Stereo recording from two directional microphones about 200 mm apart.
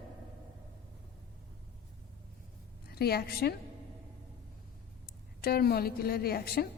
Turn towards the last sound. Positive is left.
turn(degrees=50)  # may be behind; listen again after turning